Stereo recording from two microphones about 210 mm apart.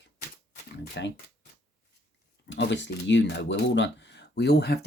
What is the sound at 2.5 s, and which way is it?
Speech, 55° left (ahead or behind).